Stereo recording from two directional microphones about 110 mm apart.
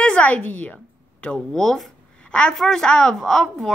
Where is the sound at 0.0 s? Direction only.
10° left (ahead or behind).